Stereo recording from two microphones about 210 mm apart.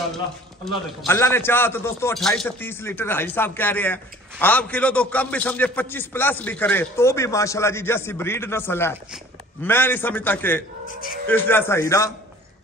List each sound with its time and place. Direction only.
0.6 s a man's voice: centre (ahead or behind)
10.9 s speech: 40° left (ahead or behind)
11.2 s speech: 10° left (ahead or behind)